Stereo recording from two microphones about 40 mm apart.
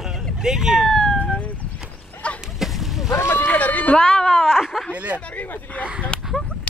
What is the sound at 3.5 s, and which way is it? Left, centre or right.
Speech, left.